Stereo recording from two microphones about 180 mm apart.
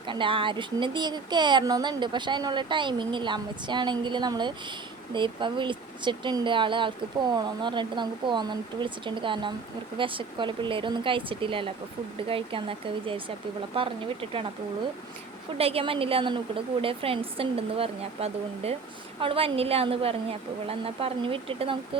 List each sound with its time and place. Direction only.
0.1 s speech: 30° right (ahead or behind)
15.5 s a woman's voice: 35° right (ahead or behind)